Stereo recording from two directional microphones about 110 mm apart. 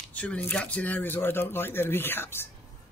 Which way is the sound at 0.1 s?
15° left (ahead or behind).